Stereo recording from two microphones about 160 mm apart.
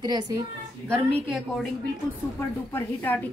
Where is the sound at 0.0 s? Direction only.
25° right (ahead or behind).